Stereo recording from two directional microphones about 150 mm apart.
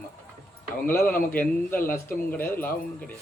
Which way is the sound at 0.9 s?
15° left (ahead or behind).